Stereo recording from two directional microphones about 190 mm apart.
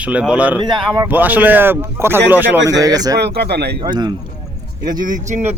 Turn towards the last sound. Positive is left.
turn(degrees=-40)  # may be behind; listen again after turning